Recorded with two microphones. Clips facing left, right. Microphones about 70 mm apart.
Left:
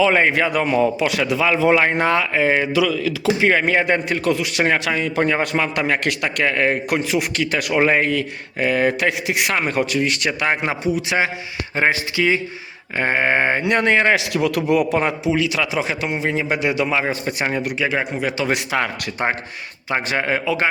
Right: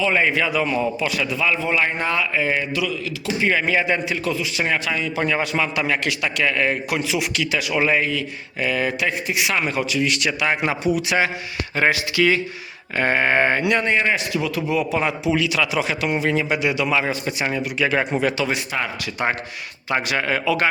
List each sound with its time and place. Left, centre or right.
0.2 s a man's voice: left
0.8 s a man's voice: left
9.0 s a man's voice: left
13.0 s a sound: centre
13.6 s a man's voice: left
14.0 s speech: left
14.8 s a man's voice: left
17.7 s a sound: centre
18.5 s speech: left
19.9 s a man's voice: left